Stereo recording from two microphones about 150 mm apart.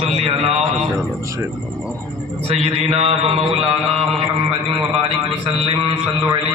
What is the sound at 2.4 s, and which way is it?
A man's voice, 45° right (ahead or behind).